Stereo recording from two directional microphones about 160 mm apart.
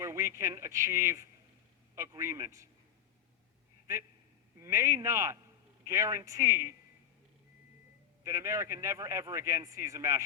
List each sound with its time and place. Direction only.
0.0 s speech: 15° right (ahead or behind)
4.6 s speech: 20° right (ahead or behind)
8.2 s speech: 20° right (ahead or behind)